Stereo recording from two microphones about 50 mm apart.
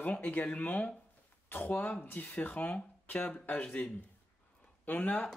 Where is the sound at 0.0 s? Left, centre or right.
Left.